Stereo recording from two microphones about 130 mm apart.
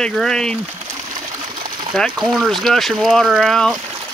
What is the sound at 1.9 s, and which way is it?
Speech, centre (ahead or behind).